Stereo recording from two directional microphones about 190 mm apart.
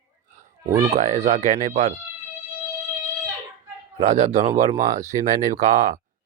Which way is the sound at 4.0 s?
40° right (ahead or behind).